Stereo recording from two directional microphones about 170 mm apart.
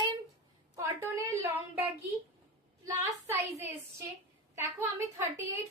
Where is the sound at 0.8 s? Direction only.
15° right (ahead or behind).